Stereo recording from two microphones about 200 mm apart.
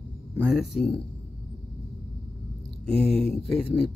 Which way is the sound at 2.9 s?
Centre (ahead or behind).